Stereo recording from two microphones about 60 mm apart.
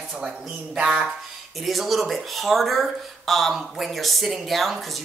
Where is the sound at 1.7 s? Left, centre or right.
Centre.